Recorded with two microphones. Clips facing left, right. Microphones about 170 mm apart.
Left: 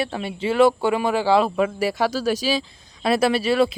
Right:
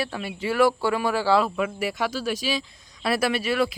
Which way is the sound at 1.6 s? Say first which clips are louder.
Left 5 dB; 30° left (ahead or behind).